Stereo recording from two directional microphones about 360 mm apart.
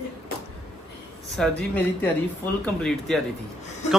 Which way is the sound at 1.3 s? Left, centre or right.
Centre.